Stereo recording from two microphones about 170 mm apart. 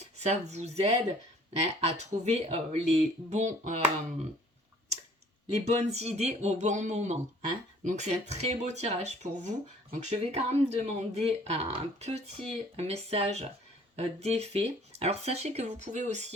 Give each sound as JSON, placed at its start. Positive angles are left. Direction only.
{"t": 0.0, "sound": "speech", "side_deg": -40}
{"t": 5.5, "sound": "speech", "side_deg": -40}